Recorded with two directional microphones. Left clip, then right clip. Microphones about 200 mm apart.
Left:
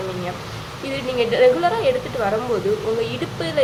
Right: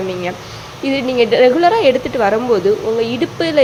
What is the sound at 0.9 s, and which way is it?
Speech, 30° right (ahead or behind).